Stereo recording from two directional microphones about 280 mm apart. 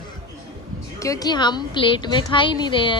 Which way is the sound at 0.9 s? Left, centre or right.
Centre.